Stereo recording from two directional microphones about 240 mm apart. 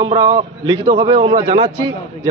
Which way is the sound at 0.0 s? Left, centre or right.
Centre.